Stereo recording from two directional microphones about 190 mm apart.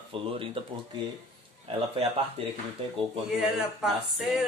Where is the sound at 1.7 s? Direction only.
30° right (ahead or behind).